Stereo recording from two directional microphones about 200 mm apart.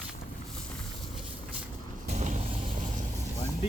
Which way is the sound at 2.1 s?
35° right (ahead or behind).